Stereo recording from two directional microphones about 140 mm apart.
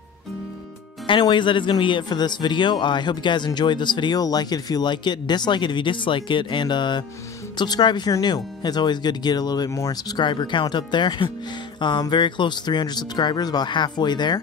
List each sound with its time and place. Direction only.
1.0 s speech: 35° left (ahead or behind)